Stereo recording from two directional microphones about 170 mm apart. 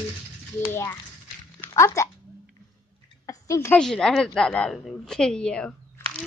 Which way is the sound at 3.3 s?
15° left (ahead or behind).